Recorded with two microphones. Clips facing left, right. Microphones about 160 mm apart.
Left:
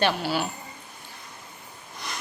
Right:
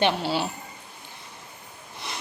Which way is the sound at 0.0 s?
25° right (ahead or behind).